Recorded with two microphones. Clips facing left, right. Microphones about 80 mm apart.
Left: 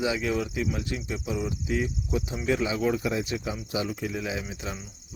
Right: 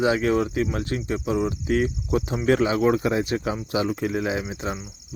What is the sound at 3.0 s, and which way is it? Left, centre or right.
Speech, right.